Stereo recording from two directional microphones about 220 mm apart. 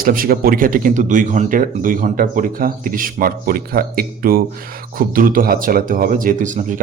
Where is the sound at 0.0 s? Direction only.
40° right (ahead or behind).